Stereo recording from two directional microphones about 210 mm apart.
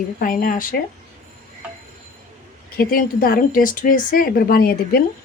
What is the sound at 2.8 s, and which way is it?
A woman's voice, 45° left (ahead or behind).